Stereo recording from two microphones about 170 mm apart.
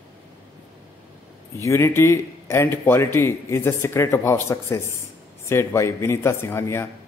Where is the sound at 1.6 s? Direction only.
15° left (ahead or behind).